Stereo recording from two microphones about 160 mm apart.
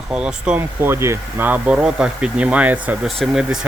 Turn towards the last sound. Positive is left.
turn(degrees=-5)  # may be behind; listen again after turning